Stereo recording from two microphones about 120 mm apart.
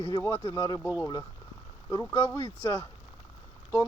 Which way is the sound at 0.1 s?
25° left (ahead or behind).